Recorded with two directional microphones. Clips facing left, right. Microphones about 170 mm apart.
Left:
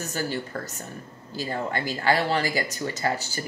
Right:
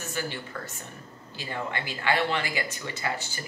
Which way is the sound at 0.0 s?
40° left (ahead or behind).